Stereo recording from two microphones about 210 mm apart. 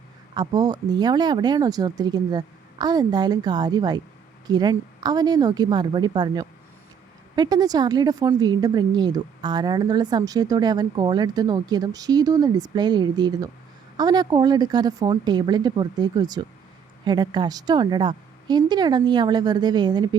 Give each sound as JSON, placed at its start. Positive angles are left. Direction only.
{"t": 0.3, "sound": "a woman's voice", "side_deg": -20}